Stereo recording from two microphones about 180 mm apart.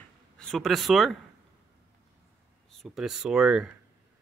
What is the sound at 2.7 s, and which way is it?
Speech, centre (ahead or behind).